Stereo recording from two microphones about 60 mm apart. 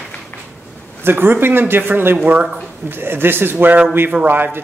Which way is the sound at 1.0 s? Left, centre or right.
Right.